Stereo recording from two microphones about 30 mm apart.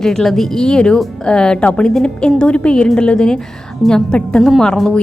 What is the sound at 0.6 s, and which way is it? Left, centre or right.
A woman's voice, left.